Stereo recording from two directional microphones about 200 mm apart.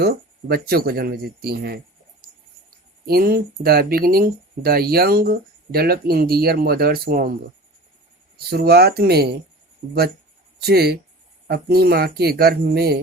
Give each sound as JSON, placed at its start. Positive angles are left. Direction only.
{"t": 0.0, "sound": "speech", "side_deg": -50}
{"t": 8.4, "sound": "speech", "side_deg": -50}
{"t": 9.8, "sound": "speech", "side_deg": -30}
{"t": 10.6, "sound": "speech", "side_deg": -55}